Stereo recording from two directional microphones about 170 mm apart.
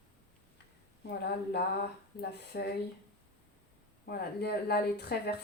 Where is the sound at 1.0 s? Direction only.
70° left (ahead or behind).